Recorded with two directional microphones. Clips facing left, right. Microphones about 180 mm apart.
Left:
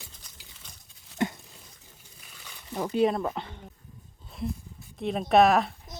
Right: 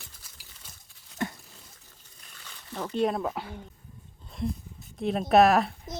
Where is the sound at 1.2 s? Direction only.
20° left (ahead or behind).